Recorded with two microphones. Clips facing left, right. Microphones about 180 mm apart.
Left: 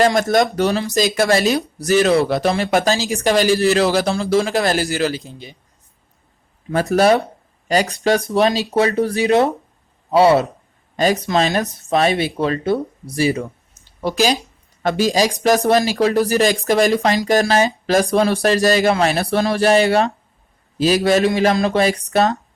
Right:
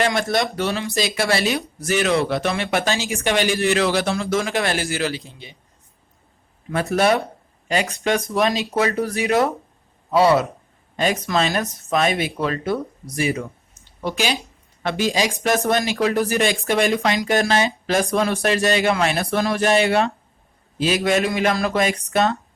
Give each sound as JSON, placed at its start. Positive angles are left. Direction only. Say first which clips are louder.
{"t": 0.0, "sound": "speech", "louder": "left 6 dB", "side_deg": 40}
{"t": 6.9, "sound": "a man's voice", "louder": "left 4 dB", "side_deg": 35}
{"t": 10.9, "sound": "speech", "louder": "left 4 dB", "side_deg": 35}
{"t": 21.5, "sound": "a man's voice", "louder": "left 4 dB", "side_deg": 20}
{"t": 21.8, "sound": "speech", "louder": "left 3 dB", "side_deg": 35}